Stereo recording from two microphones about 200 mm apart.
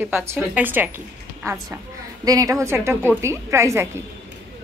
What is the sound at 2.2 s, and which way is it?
A woman's voice, 20° right (ahead or behind).